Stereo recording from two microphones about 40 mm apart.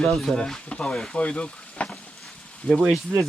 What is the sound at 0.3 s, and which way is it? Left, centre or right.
Speech, centre.